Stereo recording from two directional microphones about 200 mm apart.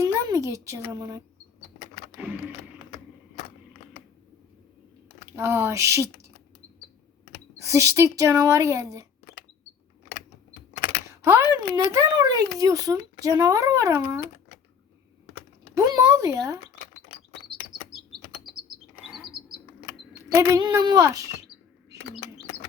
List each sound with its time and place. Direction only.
0.0 s speech: 15° right (ahead or behind)
5.4 s speech: 15° right (ahead or behind)
7.6 s speech: 15° right (ahead or behind)
11.2 s speech: 15° right (ahead or behind)
15.7 s a sound: 15° right (ahead or behind)
19.0 s chirp: centre (ahead or behind)
20.1 s speech: 20° right (ahead or behind)